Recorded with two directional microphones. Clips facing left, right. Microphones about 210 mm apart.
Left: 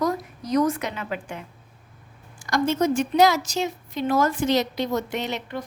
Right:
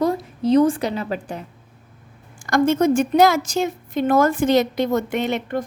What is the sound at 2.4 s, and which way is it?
A woman's voice, 50° right (ahead or behind).